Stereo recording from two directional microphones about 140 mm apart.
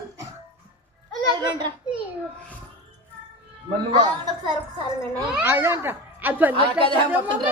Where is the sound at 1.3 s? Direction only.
30° right (ahead or behind).